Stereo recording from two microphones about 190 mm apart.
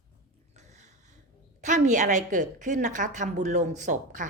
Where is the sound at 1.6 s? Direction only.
40° right (ahead or behind).